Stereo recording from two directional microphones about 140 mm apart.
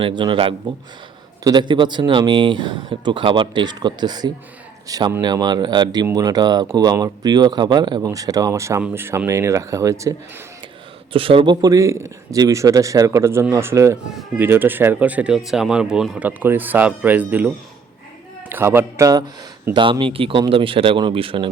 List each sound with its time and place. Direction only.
0.0 s speech: 35° right (ahead or behind); by 10.2 s 20° right (ahead or behind)
11.1 s speech: 40° right (ahead or behind)
11.6 s speech: 25° right (ahead or behind)
19.7 s speech: 35° right (ahead or behind)